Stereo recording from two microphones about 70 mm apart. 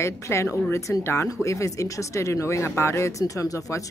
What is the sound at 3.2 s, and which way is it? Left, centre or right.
Speech, left.